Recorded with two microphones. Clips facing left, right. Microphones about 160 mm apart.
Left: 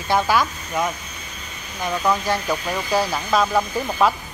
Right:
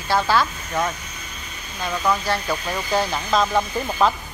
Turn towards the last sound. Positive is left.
turn(degrees=5)  # may be behind; listen again after turning